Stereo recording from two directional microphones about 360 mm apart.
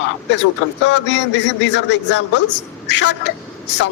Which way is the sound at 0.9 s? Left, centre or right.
Left.